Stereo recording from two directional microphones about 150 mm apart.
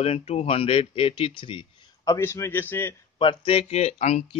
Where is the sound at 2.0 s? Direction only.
20° left (ahead or behind).